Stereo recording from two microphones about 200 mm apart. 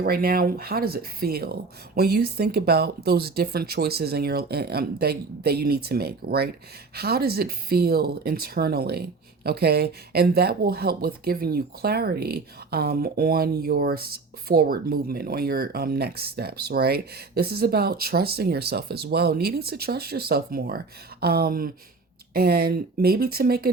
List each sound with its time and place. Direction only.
0.0 s speech: 50° right (ahead or behind)